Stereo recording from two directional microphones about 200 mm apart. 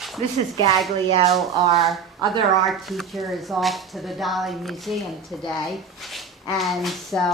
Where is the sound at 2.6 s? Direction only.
Centre (ahead or behind).